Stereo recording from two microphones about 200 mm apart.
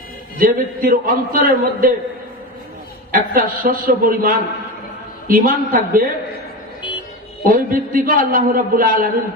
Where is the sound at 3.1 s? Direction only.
45° right (ahead or behind).